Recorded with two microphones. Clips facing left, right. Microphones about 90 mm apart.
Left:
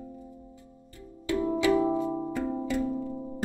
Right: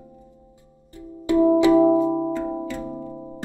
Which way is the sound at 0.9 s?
20° right (ahead or behind).